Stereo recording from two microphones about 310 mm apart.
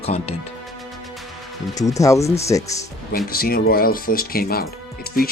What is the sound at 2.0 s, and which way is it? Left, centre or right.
Speech, centre.